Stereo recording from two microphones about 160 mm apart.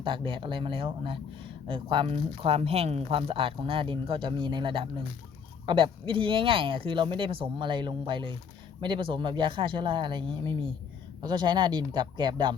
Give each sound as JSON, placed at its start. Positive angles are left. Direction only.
{"t": 0.0, "sound": "speech", "side_deg": -30}